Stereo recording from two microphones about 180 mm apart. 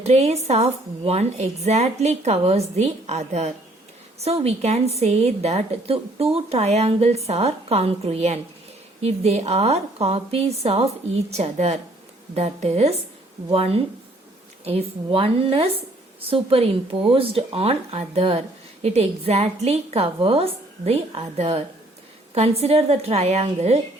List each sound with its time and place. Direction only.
0.0 s speech: 35° right (ahead or behind)